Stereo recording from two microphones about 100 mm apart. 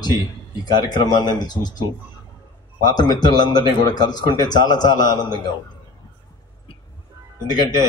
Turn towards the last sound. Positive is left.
turn(degrees=45)  # may be behind; listen again after turning